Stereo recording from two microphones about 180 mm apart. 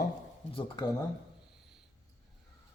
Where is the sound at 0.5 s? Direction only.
25° left (ahead or behind).